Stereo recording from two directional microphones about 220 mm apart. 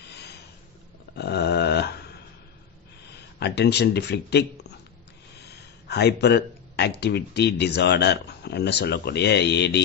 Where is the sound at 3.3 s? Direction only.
50° left (ahead or behind).